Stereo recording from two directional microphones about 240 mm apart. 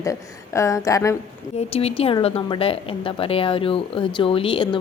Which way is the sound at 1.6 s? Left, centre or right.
Left.